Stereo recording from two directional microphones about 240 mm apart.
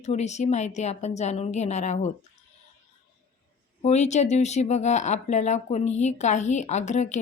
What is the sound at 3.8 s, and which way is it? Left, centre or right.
A woman's voice, left.